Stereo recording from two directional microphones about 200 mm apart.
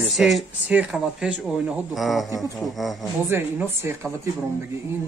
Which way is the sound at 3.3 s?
10° right (ahead or behind).